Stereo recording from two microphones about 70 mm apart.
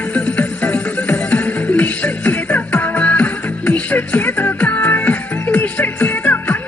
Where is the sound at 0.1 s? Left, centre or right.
Centre.